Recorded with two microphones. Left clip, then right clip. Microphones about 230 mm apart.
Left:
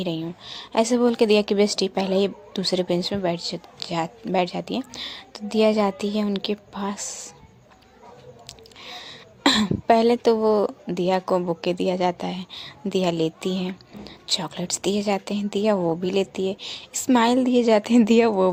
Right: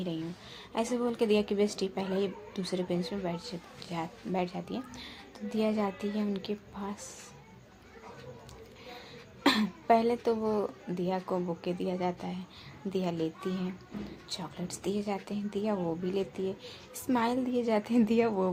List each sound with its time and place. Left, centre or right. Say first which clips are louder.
0.0 s speech: left 9 dB; left
8.4 s a woman's voice: left 8 dB; left